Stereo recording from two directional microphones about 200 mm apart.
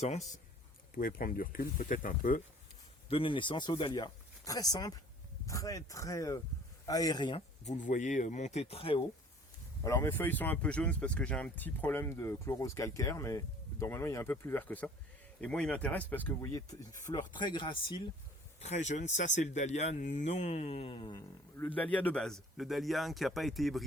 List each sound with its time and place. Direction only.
0.0 s speech: 35° left (ahead or behind)
0.9 s speech: 45° left (ahead or behind)
3.1 s speech: 25° left (ahead or behind)
7.6 s speech: 35° left (ahead or behind)
9.8 s speech: 15° left (ahead or behind)
18.6 s speech: 35° left (ahead or behind)
21.8 s speech: 10° left (ahead or behind)